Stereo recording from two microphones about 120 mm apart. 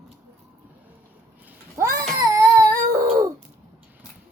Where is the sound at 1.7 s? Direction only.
25° right (ahead or behind).